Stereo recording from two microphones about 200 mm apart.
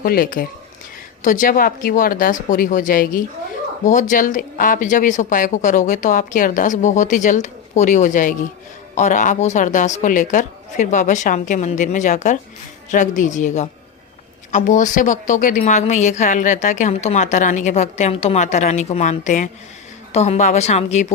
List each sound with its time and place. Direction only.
0.0 s a woman's voice: 50° left (ahead or behind)